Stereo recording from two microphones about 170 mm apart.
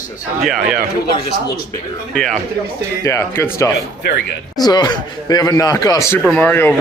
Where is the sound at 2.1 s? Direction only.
5° left (ahead or behind).